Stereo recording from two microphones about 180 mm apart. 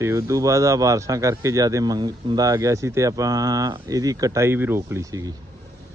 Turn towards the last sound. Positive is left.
turn(degrees=-20)  # may be behind; listen again after turning